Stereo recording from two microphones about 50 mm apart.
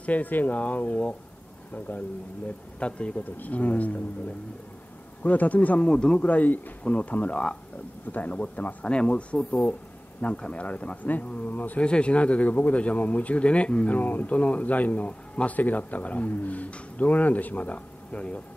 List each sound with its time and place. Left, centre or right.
0.0 s speech: left
2.8 s speech: left
5.2 s speech: left
5.9 s speech: centre
6.2 s speech: left
8.8 s speech: centre; by 11.8 s left
11.8 s speech: left